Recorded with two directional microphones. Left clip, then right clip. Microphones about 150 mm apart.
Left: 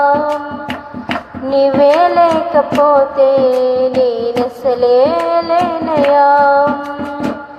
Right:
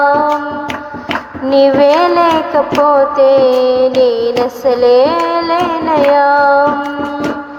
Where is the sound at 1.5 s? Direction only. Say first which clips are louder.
Right 2 dB; 15° right (ahead or behind).